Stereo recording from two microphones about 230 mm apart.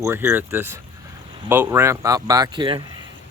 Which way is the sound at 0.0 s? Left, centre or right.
Centre.